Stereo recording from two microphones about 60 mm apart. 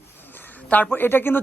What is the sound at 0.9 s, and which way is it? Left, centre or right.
Speech, left.